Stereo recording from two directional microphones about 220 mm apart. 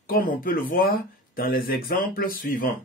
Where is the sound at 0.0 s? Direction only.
40° left (ahead or behind).